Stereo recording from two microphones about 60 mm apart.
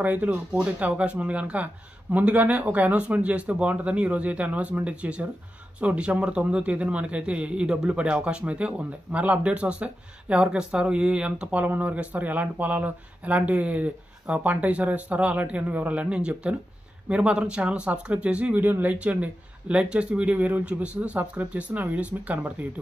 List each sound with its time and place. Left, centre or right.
0.0 s speech: right